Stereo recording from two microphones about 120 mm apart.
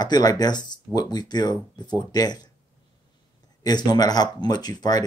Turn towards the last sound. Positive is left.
turn(degrees=35)  # may be behind; listen again after turning